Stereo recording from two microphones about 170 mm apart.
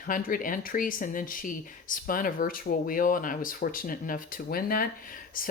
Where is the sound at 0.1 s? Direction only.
55° left (ahead or behind).